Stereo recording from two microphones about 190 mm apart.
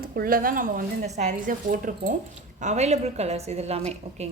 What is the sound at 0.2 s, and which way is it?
A woman's voice, 50° right (ahead or behind).